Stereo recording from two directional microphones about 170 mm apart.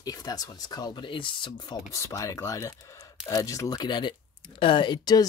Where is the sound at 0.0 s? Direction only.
20° left (ahead or behind).